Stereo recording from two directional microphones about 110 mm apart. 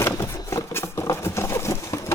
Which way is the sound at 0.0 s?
25° left (ahead or behind).